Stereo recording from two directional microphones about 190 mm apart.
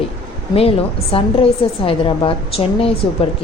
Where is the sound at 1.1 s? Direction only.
30° left (ahead or behind).